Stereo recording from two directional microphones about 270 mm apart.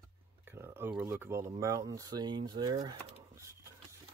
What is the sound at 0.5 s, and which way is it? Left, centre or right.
Speech, centre.